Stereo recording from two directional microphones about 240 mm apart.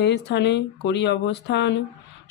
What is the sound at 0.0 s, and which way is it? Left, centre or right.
Speech, left.